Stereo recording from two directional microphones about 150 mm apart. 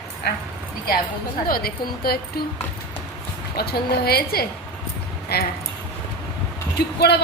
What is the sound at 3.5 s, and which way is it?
A woman's voice, 90° left.